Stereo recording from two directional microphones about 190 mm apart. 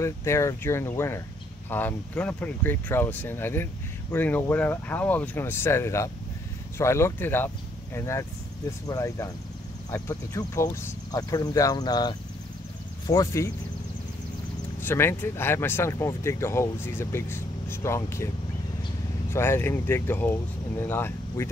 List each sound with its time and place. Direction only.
0.0 s speech: 15° left (ahead or behind)
14.8 s speech: 10° left (ahead or behind)
19.3 s speech: 10° left (ahead or behind)